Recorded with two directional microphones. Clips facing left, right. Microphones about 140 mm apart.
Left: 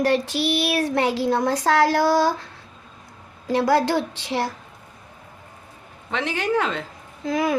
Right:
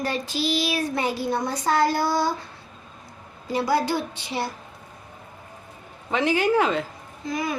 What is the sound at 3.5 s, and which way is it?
Child singing, 90° left.